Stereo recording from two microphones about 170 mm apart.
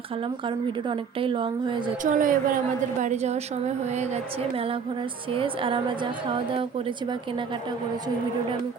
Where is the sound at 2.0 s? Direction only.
50° right (ahead or behind); by 7.7 s 30° right (ahead or behind).